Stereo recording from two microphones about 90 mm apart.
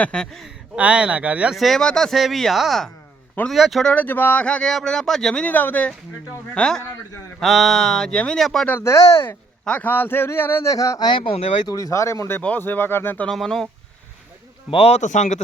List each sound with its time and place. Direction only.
0.0 s speech: 10° left (ahead or behind)
0.8 s speech: 15° right (ahead or behind)
1.5 s speech: centre (ahead or behind)
3.9 s speech: 20° left (ahead or behind)
5.5 s a man's voice: 20° left (ahead or behind); by 8.6 s 5° left (ahead or behind)
8.8 s speech: 35° left (ahead or behind)
9.6 s a man's voice: 15° left (ahead or behind)
10.7 s speech: 40° left (ahead or behind)
11.1 s speech: 80° left
11.7 s speech: 35° left (ahead or behind)
12.4 s a man's voice: 20° left (ahead or behind)
13.2 s speech: 5° left (ahead or behind)